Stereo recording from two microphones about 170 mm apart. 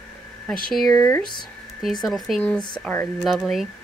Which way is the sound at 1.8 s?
Centre (ahead or behind).